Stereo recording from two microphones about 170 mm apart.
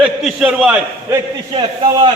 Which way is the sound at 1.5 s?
30° right (ahead or behind).